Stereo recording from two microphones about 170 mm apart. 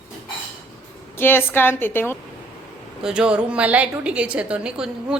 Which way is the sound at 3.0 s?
5° right (ahead or behind).